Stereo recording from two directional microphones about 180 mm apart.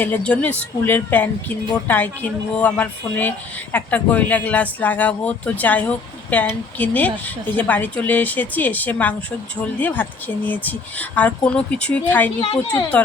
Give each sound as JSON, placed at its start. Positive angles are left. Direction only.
{"t": 0.0, "sound": "speech", "side_deg": 10}
{"t": 12.4, "sound": "a woman's voice", "side_deg": 30}